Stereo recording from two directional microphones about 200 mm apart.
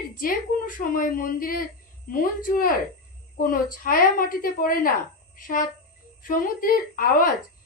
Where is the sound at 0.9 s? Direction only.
45° left (ahead or behind).